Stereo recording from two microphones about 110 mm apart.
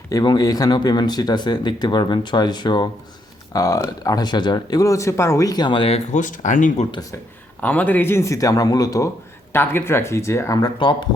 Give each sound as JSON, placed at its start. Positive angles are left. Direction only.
{"t": 0.1, "sound": "speech", "side_deg": 35}
{"t": 7.6, "sound": "speech", "side_deg": 15}
{"t": 9.5, "sound": "speech", "side_deg": 20}